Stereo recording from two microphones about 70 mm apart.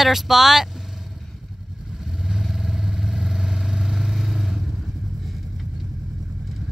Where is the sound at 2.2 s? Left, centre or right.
Centre.